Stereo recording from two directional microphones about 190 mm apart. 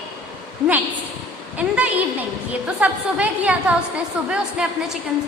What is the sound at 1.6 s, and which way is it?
A woman's voice, 10° right (ahead or behind).